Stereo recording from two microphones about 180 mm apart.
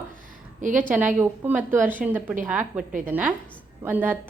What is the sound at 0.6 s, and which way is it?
Speech, 45° right (ahead or behind).